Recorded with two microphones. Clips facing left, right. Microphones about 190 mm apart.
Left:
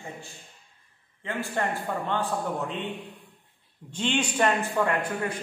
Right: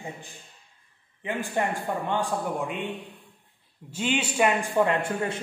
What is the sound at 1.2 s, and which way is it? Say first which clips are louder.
A man's voice: right 2 dB; 15° right (ahead or behind).